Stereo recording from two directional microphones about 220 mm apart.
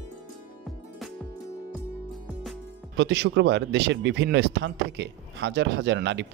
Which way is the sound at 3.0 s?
50° right (ahead or behind).